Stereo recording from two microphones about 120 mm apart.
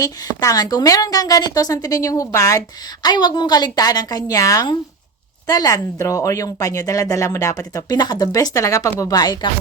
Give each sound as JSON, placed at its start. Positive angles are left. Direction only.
{"t": 0.0, "sound": "a woman's voice", "side_deg": 30}